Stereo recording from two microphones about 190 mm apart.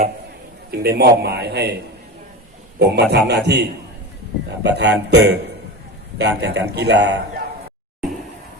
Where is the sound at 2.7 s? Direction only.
60° right (ahead or behind).